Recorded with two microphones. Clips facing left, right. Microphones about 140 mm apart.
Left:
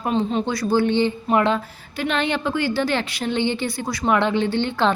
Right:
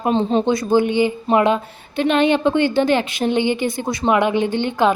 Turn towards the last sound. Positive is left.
turn(degrees=-15)  # may be behind; listen again after turning